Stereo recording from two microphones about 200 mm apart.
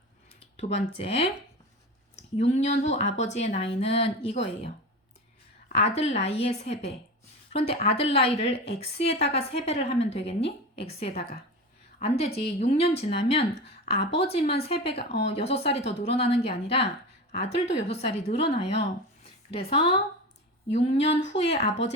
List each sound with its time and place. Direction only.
0.3 s a woman's voice: 30° left (ahead or behind)